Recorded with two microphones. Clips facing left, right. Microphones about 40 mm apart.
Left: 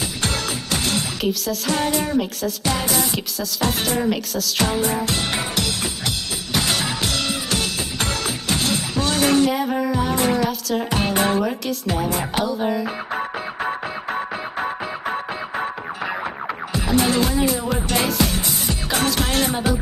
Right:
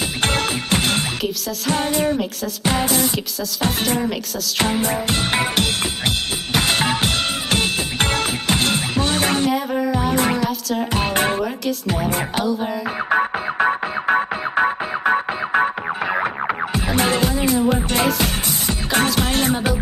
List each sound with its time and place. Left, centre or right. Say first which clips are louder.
0.2 s music: right 6 dB; right
1.7 s speech: right 2 dB; right
4.6 s music: right 1 dB; right
9.5 s music: right 1 dB; centre
11.0 s speech: even; right
12.4 s music: left 2 dB; centre
13.1 s music: right 7 dB; right